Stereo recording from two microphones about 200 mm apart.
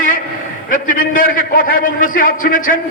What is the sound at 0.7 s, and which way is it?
A man's voice, 40° left (ahead or behind).